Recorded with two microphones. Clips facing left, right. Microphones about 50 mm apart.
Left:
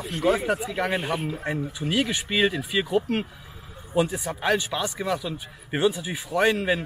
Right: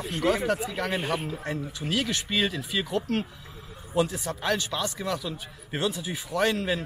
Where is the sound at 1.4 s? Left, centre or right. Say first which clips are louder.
Left 4 dB; centre.